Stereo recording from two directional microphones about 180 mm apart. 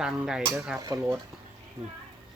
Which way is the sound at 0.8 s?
20° right (ahead or behind).